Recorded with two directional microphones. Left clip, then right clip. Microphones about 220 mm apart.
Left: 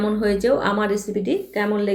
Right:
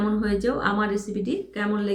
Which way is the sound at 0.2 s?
5° right (ahead or behind).